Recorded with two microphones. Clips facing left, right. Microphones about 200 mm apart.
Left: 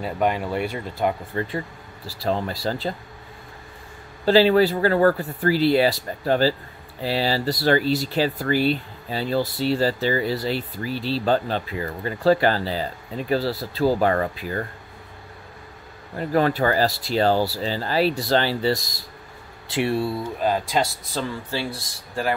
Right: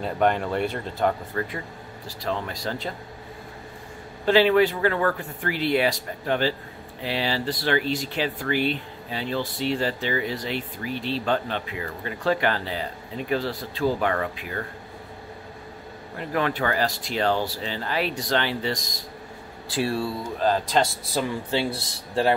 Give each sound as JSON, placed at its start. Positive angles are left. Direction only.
{"t": 0.0, "sound": "speech", "side_deg": 5}
{"t": 1.3, "sound": "speech", "side_deg": 25}
{"t": 2.1, "sound": "speech", "side_deg": 35}
{"t": 4.3, "sound": "speech", "side_deg": 35}
{"t": 16.2, "sound": "speech", "side_deg": 40}
{"t": 19.7, "sound": "speech", "side_deg": 20}
{"t": 20.2, "sound": "speech", "side_deg": 10}
{"t": 21.5, "sound": "speech", "side_deg": -20}